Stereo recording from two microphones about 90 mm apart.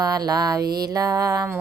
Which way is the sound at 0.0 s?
45° right (ahead or behind).